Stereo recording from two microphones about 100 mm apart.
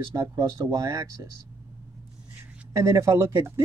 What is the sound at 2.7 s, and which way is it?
Speech, 30° right (ahead or behind).